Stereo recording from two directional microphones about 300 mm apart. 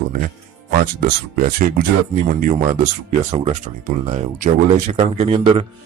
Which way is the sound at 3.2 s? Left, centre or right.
Right.